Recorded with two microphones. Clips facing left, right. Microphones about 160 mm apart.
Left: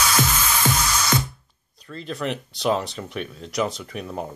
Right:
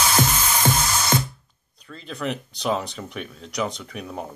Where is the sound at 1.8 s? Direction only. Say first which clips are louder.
Left 1 dB; centre (ahead or behind).